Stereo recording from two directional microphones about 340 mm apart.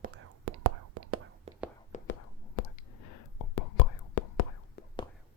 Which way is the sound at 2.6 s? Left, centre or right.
Left.